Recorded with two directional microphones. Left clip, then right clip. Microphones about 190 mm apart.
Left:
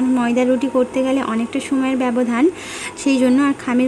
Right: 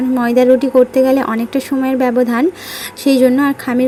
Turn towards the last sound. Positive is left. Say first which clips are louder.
# right 3 dB
turn(degrees=-15)  # may be behind; listen again after turning